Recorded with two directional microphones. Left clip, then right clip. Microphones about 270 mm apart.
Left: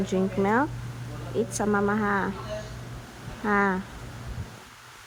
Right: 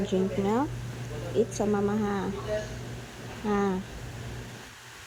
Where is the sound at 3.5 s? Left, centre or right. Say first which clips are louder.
Left 5 dB; left.